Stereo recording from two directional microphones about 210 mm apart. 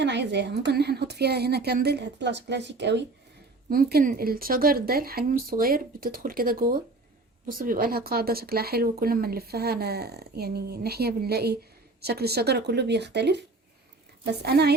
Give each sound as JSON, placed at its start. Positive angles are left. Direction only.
{"t": 0.0, "sound": "speech", "side_deg": -55}